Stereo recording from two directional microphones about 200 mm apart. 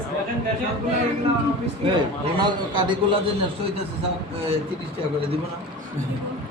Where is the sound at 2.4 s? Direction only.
20° right (ahead or behind).